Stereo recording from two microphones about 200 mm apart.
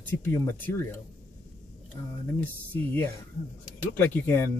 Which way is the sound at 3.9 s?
10° left (ahead or behind).